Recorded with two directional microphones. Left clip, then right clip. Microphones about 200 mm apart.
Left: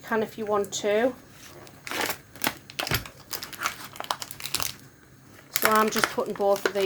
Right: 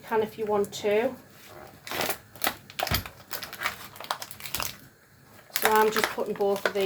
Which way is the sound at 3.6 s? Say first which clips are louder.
Left 2 dB; 20° left (ahead or behind).